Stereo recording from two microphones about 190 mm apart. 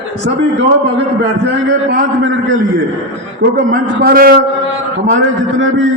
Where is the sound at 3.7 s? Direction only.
50° right (ahead or behind).